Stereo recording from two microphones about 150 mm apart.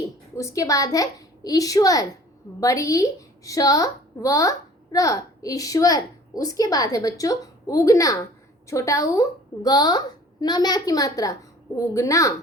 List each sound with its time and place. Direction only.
0.3 s a woman's voice: 20° left (ahead or behind)